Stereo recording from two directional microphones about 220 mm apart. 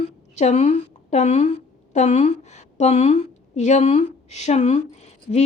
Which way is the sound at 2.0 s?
30° left (ahead or behind).